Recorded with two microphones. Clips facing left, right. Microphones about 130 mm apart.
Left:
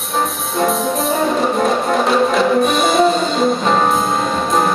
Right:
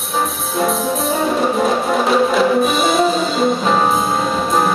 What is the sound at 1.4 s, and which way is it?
Music, centre (ahead or behind).